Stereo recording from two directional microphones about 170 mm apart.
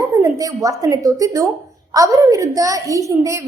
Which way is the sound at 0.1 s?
20° right (ahead or behind).